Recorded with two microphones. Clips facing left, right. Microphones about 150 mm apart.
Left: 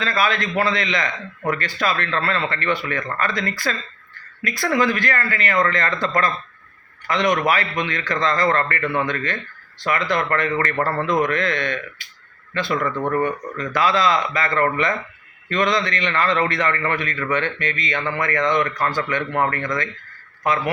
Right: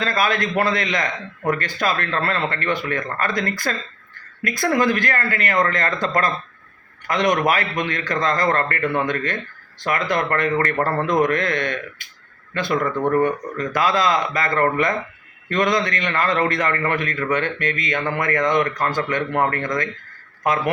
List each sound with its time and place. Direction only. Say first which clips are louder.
0.0 s a man's voice: right 1 dB; 45° right (ahead or behind)
7.1 s a man's voice: right 1 dB; 45° right (ahead or behind)
10.8 s a man's voice: right 1 dB; 20° right (ahead or behind)
11.0 s a man's voice: right 2 dB; 50° right (ahead or behind)